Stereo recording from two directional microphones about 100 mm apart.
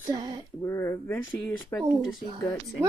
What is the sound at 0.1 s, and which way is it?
Speech, 45° right (ahead or behind).